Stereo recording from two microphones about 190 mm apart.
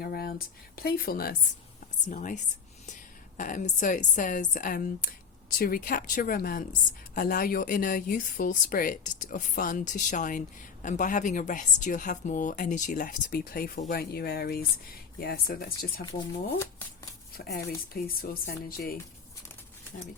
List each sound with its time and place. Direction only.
0.0 s a woman's voice: 55° left (ahead or behind)
2.0 s a woman's voice: 40° left (ahead or behind)
17.3 s a woman's voice: 55° left (ahead or behind)